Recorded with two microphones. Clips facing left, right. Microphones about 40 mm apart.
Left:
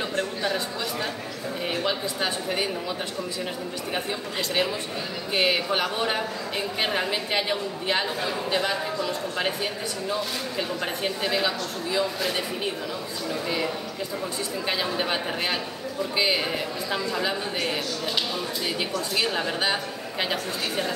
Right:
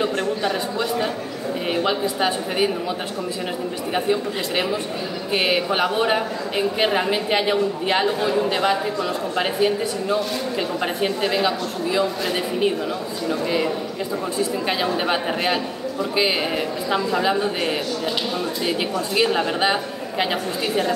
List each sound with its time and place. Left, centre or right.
0.0 s a man's voice: centre
3.9 s a man's voice: centre
13.3 s a man's voice: centre
14.7 s a man's voice: centre